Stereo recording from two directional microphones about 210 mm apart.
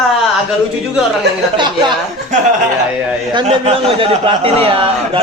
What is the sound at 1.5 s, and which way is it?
Speech, 20° right (ahead or behind).